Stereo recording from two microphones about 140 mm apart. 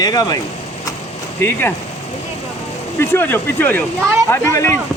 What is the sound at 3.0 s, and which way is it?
Speech, 15° left (ahead or behind).